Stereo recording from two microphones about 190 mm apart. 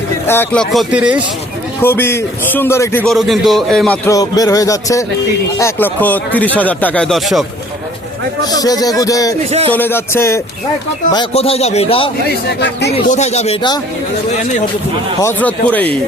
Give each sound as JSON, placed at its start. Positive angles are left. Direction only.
{"t": 0.3, "sound": "speech", "side_deg": 10}
{"t": 1.8, "sound": "speech", "side_deg": 10}
{"t": 3.1, "sound": "speech", "side_deg": 0}
{"t": 4.1, "sound": "speech", "side_deg": 20}
{"t": 8.4, "sound": "speech", "side_deg": 20}
{"t": 9.5, "sound": "speech", "side_deg": -35}
{"t": 9.7, "sound": "speech", "side_deg": 10}
{"t": 11.1, "sound": "a man's voice", "side_deg": 25}
{"t": 12.5, "sound": "speech", "side_deg": 60}
{"t": 13.1, "sound": "a man's voice", "side_deg": 35}
{"t": 15.2, "sound": "speech", "side_deg": 10}